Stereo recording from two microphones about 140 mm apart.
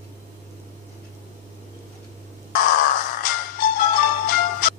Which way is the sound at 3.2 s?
90° left.